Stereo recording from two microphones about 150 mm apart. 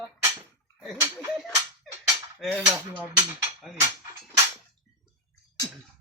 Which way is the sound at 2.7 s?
10° right (ahead or behind).